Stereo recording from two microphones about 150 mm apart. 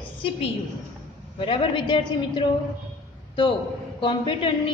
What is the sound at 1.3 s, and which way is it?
A woman's voice, 35° left (ahead or behind).